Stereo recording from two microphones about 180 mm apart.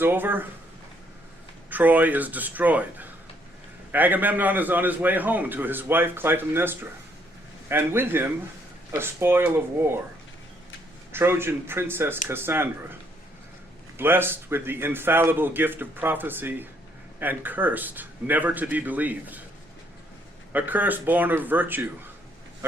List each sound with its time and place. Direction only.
0.0 s a man's voice: 10° right (ahead or behind)
1.7 s a man's voice: 10° right (ahead or behind)
11.1 s a man's voice: 15° right (ahead or behind)
14.0 s a man's voice: 10° right (ahead or behind)
20.5 s a man's voice: 10° right (ahead or behind)